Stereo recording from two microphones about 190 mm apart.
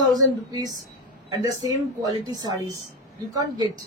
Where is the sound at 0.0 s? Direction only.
20° right (ahead or behind).